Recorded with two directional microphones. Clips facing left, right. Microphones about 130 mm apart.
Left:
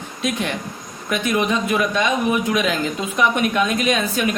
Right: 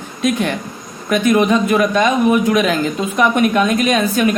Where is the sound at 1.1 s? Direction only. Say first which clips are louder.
Right 7 dB; 45° right (ahead or behind).